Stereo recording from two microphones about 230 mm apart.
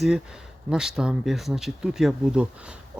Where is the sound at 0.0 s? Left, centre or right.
Centre.